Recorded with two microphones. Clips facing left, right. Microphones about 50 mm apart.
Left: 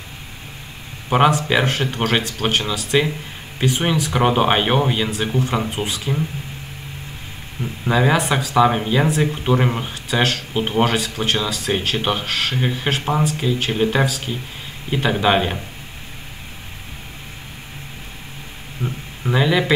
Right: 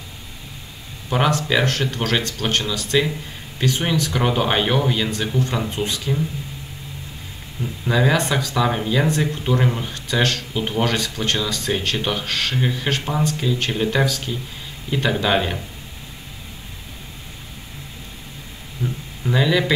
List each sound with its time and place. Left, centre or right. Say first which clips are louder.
1.1 s speech: left 3 dB; left
2.2 s speech: left 2 dB; centre
7.6 s speech: left 1 dB; centre
11.2 s speech: left 1 dB; centre
12.0 s speech: left 2 dB; left
12.3 s speech: left 1 dB; centre
18.8 s a sound: even; left